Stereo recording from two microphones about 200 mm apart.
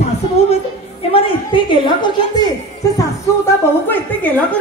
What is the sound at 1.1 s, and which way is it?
A woman's voice, 25° left (ahead or behind).